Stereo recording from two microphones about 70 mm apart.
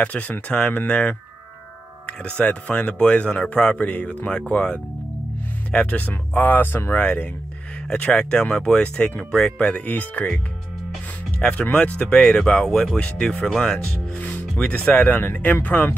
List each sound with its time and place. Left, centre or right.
0.0 s speech: centre
7.9 s speech: centre
11.4 s speech: centre